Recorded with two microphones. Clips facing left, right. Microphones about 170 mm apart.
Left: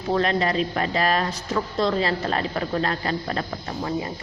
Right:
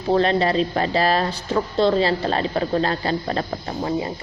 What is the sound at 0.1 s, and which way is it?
Speech, 30° right (ahead or behind).